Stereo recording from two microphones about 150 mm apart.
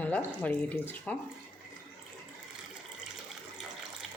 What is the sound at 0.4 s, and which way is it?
Speech, 10° left (ahead or behind).